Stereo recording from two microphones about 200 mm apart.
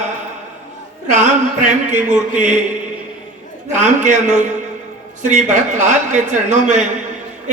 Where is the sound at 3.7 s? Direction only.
40° right (ahead or behind).